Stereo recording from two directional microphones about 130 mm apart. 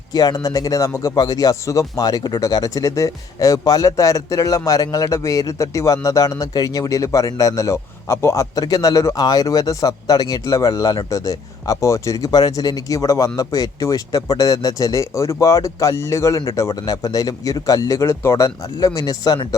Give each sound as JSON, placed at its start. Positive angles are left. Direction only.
{"t": 0.1, "sound": "speech", "side_deg": 30}